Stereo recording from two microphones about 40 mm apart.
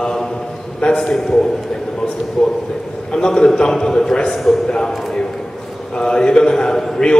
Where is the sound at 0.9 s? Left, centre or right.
Centre.